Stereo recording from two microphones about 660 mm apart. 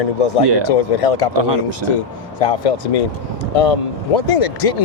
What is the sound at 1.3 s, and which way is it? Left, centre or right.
Speech, right.